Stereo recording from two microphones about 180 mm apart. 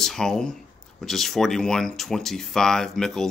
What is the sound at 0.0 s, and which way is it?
Speech, 5° left (ahead or behind).